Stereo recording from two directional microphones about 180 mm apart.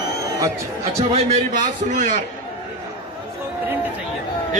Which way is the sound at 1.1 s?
40° right (ahead or behind).